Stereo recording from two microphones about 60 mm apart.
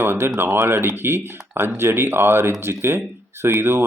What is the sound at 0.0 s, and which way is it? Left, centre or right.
Speech, right.